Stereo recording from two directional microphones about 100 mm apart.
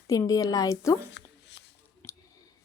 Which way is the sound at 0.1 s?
35° left (ahead or behind).